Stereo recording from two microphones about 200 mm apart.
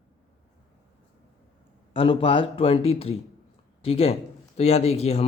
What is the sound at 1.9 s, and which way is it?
Speech, 25° left (ahead or behind).